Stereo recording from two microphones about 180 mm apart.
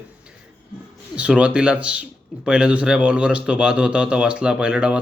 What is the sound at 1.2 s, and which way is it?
Speech, 5° right (ahead or behind).